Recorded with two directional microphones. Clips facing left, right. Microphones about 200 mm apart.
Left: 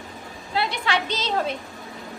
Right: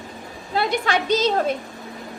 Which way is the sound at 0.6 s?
45° right (ahead or behind).